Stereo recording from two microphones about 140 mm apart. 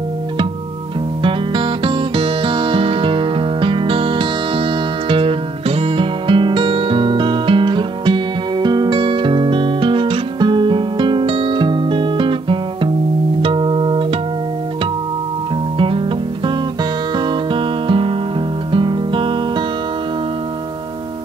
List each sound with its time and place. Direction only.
1.2 s music: 35° right (ahead or behind)
17.3 s music: 40° right (ahead or behind)